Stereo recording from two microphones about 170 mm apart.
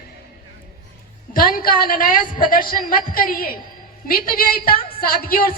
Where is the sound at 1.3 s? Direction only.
60° left (ahead or behind).